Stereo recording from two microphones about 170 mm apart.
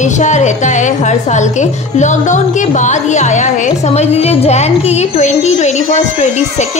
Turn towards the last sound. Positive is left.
turn(degrees=45)  # may be behind; listen again after turning